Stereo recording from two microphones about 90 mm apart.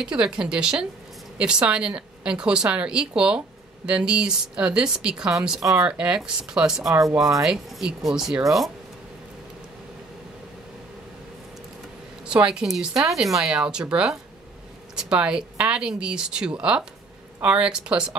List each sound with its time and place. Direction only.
0.0 s speech: 10° right (ahead or behind)
12.3 s speech: 10° right (ahead or behind)